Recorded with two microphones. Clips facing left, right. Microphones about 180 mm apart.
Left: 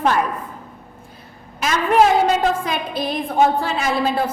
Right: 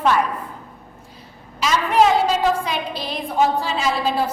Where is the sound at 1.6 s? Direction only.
50° left (ahead or behind).